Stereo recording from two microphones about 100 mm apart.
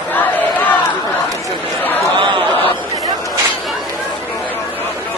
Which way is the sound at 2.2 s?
55° right (ahead or behind).